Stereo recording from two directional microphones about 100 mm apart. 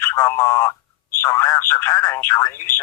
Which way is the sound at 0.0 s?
30° left (ahead or behind).